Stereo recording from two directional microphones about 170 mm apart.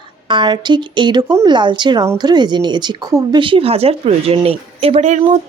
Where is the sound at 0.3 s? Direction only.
25° right (ahead or behind).